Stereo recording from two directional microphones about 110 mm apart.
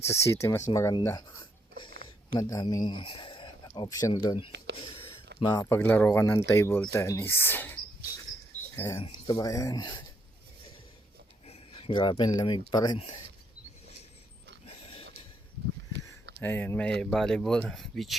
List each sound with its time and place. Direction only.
0.1 s speech: 25° left (ahead or behind); by 3.5 s 50° left (ahead or behind)
3.8 s speech: 30° left (ahead or behind)
4.1 s speech: 50° left (ahead or behind)
5.5 s speech: 25° left (ahead or behind)
5.8 s speech: 15° left (ahead or behind)
9.0 s speech: 50° left (ahead or behind)
9.3 s speech: 30° left (ahead or behind)
11.7 s speech: 50° left (ahead or behind)
14.7 s a sound: 60° left (ahead or behind)
16.4 s speech: 20° left (ahead or behind); by 18.2 s centre (ahead or behind)